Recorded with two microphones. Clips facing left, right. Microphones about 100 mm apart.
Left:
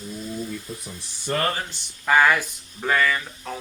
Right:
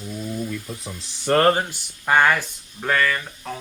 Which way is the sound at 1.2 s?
65° right (ahead or behind).